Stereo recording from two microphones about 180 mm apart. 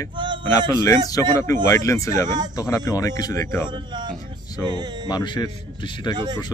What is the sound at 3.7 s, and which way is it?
Speech, 25° right (ahead or behind).